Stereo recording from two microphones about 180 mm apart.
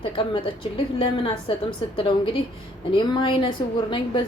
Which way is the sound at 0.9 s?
30° left (ahead or behind).